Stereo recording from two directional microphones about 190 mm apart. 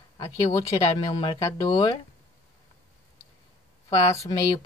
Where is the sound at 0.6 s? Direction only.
25° left (ahead or behind).